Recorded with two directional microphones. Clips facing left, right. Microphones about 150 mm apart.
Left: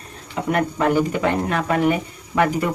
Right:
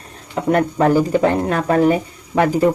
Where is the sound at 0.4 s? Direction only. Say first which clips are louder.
Right 5 dB; 35° right (ahead or behind).